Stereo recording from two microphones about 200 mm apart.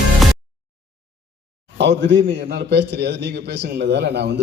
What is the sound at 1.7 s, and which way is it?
A man's voice, 60° right (ahead or behind).